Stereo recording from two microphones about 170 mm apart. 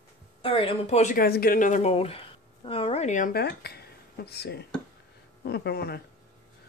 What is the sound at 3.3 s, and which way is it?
Speech, 70° left (ahead or behind).